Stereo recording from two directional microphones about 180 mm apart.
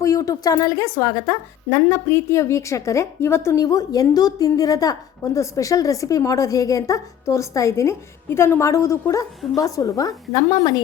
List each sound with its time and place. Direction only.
0.0 s a woman's voice: 20° left (ahead or behind)